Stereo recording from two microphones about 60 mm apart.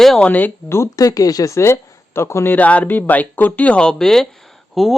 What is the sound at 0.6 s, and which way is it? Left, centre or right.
Speech, left.